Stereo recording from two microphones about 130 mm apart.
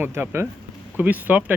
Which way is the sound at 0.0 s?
20° right (ahead or behind).